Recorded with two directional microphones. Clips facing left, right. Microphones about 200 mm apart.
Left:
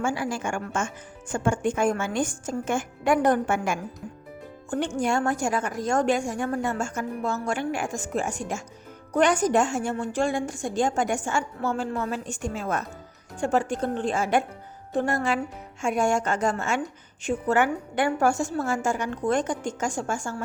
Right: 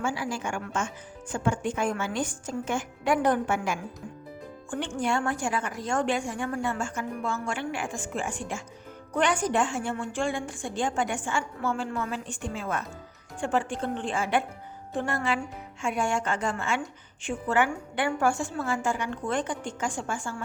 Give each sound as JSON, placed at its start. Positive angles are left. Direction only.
{"t": 0.0, "sound": "a woman's voice", "side_deg": 50}